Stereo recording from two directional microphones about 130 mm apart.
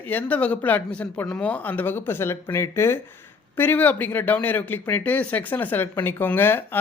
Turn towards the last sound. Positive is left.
turn(degrees=15)  # may be behind; listen again after turning